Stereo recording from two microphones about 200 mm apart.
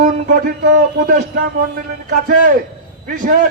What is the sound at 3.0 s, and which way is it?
Speech, 45° right (ahead or behind).